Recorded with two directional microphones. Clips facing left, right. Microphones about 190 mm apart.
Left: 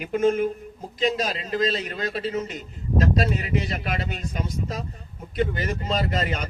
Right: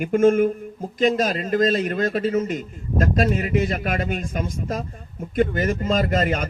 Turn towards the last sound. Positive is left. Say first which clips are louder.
# right 5 dB
turn(degrees=-50)  # may be behind; listen again after turning